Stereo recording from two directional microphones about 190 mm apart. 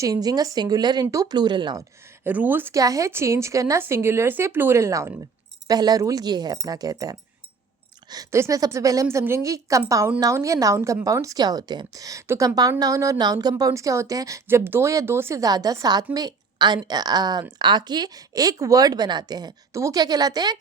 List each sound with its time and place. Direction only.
0.0 s a woman's voice: 20° right (ahead or behind)
2.2 s a woman's voice: 10° right (ahead or behind)